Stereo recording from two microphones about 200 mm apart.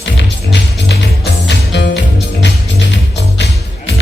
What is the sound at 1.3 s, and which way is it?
Music, 60° left (ahead or behind).